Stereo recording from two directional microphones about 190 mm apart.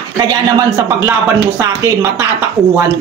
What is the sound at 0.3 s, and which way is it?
A man's voice, 20° right (ahead or behind).